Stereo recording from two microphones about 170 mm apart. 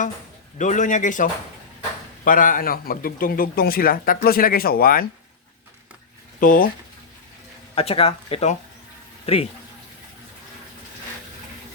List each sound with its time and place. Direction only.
0.6 s a man's voice: 45° left (ahead or behind)
6.4 s speech: 55° left (ahead or behind)
7.8 s speech: 35° left (ahead or behind)